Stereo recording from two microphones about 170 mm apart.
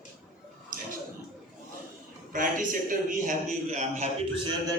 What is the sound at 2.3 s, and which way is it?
A man's voice, 50° right (ahead or behind).